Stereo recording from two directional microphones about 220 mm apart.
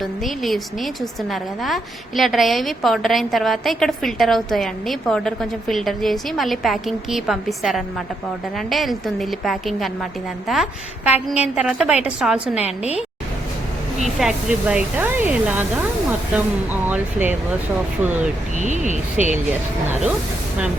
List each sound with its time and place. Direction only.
0.0 s a woman's voice: centre (ahead or behind)
12.6 s a woman's voice: 30° left (ahead or behind)
14.2 s speech: centre (ahead or behind)
18.5 s speech: 35° right (ahead or behind)
19.2 s a woman's voice: 5° right (ahead or behind)